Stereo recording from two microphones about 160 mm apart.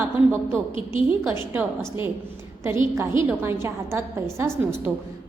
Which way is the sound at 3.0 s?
15° right (ahead or behind).